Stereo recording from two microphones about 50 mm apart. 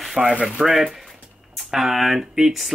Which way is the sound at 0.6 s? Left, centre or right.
Centre.